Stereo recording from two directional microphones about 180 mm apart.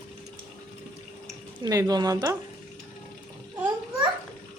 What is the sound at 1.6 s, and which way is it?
Speech, 20° right (ahead or behind).